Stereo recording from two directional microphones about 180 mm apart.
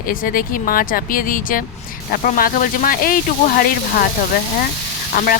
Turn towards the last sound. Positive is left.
turn(degrees=50)  # may be behind; listen again after turning